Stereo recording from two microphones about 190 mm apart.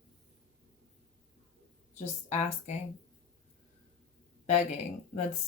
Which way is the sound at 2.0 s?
35° left (ahead or behind).